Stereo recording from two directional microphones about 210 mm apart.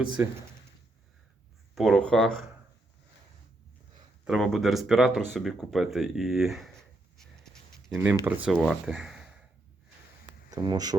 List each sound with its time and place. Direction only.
1.7 s speech: centre (ahead or behind)
4.3 s speech: centre (ahead or behind)
7.2 s a sound: centre (ahead or behind)
7.9 s speech: 10° right (ahead or behind)
10.5 s speech: 20° right (ahead or behind)